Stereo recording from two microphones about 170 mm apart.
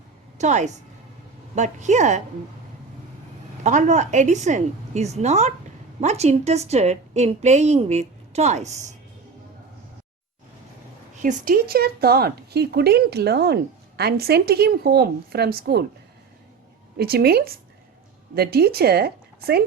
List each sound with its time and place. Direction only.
0.3 s a woman's voice: 45° right (ahead or behind)
3.6 s a woman's voice: 45° right (ahead or behind)
11.2 s a woman's voice: 50° right (ahead or behind)
17.0 s a woman's voice: 65° right (ahead or behind)